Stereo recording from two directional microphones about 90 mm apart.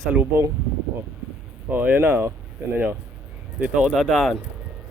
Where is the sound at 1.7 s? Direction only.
20° right (ahead or behind).